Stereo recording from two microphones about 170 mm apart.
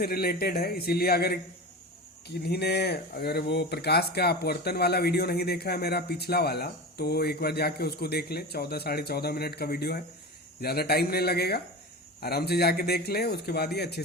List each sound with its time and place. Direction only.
0.0 s a man's voice: 65° left (ahead or behind)